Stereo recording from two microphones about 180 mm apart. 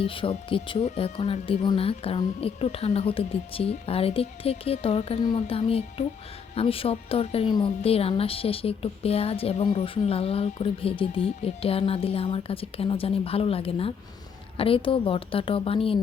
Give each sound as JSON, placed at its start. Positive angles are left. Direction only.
{"t": 0.1, "sound": "speech", "side_deg": 30}